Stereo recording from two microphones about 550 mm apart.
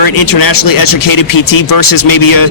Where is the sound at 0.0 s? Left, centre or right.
Left.